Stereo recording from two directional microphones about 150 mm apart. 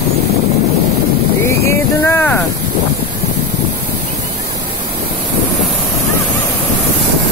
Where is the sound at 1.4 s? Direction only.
15° left (ahead or behind).